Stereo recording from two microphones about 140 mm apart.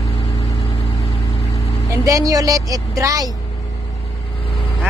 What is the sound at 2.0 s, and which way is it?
A woman's voice, 25° right (ahead or behind).